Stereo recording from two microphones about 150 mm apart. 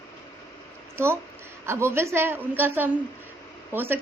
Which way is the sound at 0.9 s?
15° right (ahead or behind).